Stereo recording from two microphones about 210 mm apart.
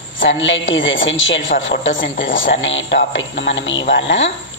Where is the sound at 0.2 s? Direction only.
65° left (ahead or behind).